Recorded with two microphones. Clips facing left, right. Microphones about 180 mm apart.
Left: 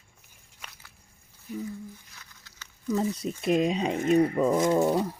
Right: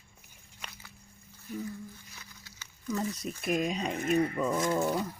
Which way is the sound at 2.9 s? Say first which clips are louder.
Left 6 dB; 25° left (ahead or behind).